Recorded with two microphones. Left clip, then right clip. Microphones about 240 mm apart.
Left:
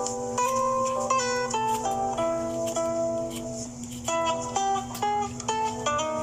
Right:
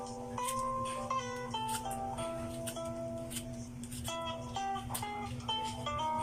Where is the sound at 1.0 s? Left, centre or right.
Left.